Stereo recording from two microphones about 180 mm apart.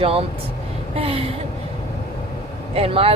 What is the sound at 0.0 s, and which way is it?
Speech, 30° right (ahead or behind).